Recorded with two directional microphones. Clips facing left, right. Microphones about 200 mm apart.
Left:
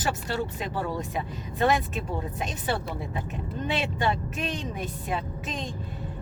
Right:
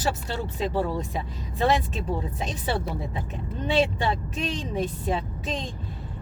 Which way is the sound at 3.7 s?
30° right (ahead or behind).